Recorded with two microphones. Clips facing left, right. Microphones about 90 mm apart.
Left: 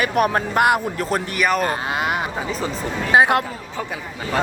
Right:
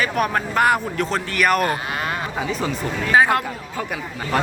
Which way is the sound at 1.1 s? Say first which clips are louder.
Left 1 dB; 15° left (ahead or behind).